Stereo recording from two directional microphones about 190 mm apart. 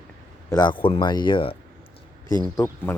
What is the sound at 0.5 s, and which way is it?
Speech, 25° left (ahead or behind).